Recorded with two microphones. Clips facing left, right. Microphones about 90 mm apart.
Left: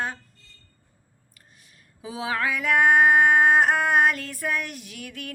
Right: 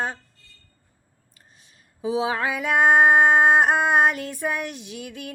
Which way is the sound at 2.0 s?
25° right (ahead or behind).